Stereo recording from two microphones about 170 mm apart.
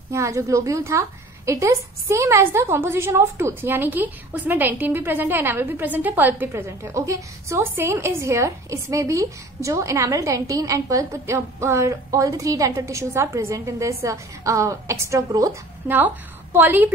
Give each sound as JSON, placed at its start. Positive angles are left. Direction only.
{"t": 0.1, "sound": "a woman's voice", "side_deg": -20}